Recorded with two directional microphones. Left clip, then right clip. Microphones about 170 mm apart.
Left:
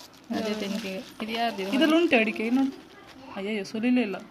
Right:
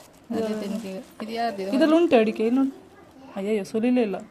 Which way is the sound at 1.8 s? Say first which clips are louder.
Right 3 dB; 55° right (ahead or behind).